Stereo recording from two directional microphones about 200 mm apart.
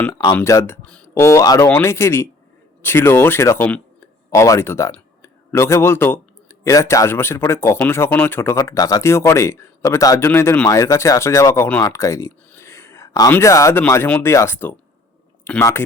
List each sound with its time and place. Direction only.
0.0 s speech: 20° left (ahead or behind)